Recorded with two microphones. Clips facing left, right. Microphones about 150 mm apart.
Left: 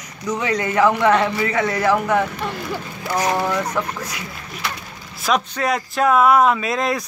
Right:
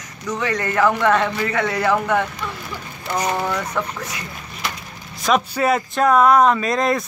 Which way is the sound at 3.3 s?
5° left (ahead or behind).